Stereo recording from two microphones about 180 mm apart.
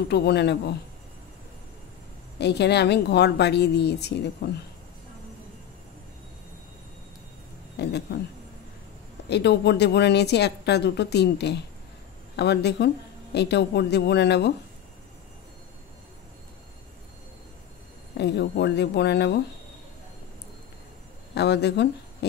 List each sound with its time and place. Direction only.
0.1 s a woman's voice: 65° left (ahead or behind)
2.3 s a woman's voice: 70° left (ahead or behind)
7.8 s a woman's voice: 70° left (ahead or behind)
9.3 s a woman's voice: 70° left (ahead or behind)
18.1 s a woman's voice: 70° left (ahead or behind)
21.4 s speech: 70° left (ahead or behind)